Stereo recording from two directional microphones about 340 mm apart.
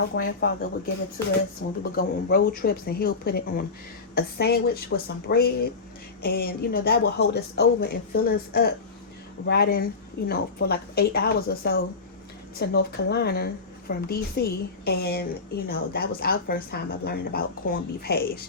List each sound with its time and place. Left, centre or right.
0.2 s a woman's voice: left
1.2 s speech: centre
1.8 s a woman's voice: left